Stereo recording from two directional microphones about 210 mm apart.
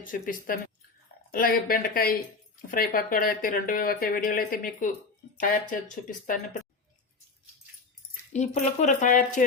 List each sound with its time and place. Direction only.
0.0 s speech: 40° left (ahead or behind)
6.1 s speech: 40° left (ahead or behind)
8.3 s speech: 35° left (ahead or behind)